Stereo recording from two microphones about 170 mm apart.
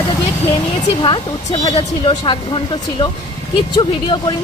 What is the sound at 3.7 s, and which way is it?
Speech, 30° left (ahead or behind).